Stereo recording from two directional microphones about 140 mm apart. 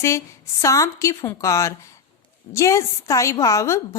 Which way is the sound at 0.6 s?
20° left (ahead or behind).